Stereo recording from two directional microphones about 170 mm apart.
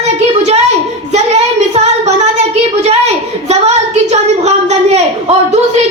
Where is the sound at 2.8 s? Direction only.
40° right (ahead or behind).